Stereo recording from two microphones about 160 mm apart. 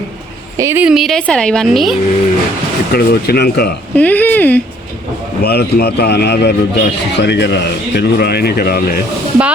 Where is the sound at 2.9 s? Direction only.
80° left.